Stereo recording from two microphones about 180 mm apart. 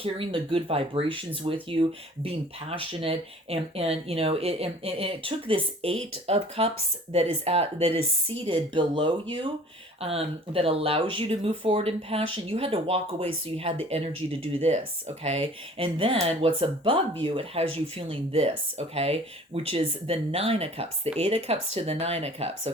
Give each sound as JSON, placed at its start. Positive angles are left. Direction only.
{"t": 0.0, "sound": "speech", "side_deg": -30}